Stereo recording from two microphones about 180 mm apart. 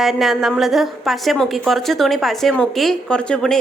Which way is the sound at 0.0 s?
Centre (ahead or behind).